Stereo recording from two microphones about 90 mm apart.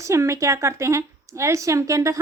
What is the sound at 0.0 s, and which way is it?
Speech, 35° right (ahead or behind).